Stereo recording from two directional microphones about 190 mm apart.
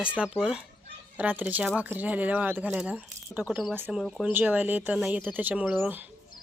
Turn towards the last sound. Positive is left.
turn(degrees=-10)  # may be behind; listen again after turning